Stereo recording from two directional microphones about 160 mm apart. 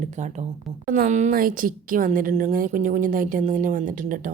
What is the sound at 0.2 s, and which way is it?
A woman's voice, 45° right (ahead or behind).